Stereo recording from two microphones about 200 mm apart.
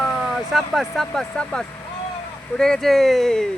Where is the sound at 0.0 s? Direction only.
Centre (ahead or behind).